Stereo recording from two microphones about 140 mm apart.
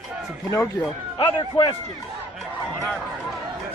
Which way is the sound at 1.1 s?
30° left (ahead or behind).